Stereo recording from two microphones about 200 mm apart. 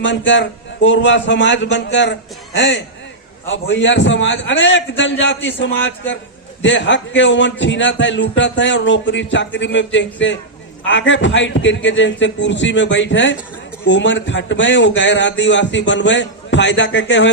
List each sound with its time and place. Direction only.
0.0 s a man's voice: 65° left (ahead or behind)